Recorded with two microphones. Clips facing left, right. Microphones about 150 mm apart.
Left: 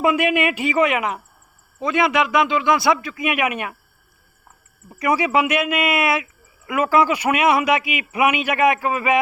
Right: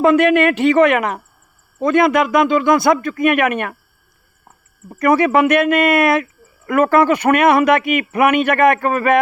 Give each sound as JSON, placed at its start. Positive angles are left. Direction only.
{"t": 0.0, "sound": "a man's voice", "side_deg": 10}
{"t": 0.8, "sound": "a man's voice", "side_deg": -60}
{"t": 4.9, "sound": "a man's voice", "side_deg": -60}